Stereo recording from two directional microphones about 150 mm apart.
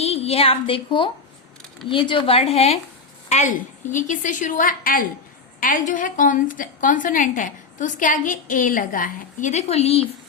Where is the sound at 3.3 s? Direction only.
55° left (ahead or behind).